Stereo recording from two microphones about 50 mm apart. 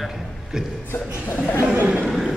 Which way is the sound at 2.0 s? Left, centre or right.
Centre.